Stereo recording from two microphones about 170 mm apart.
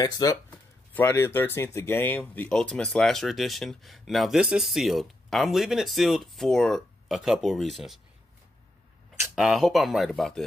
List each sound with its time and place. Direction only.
0.0 s speech: 20° left (ahead or behind); by 8.0 s centre (ahead or behind)
9.2 s speech: 5° right (ahead or behind)